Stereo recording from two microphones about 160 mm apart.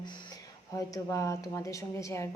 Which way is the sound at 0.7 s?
20° left (ahead or behind).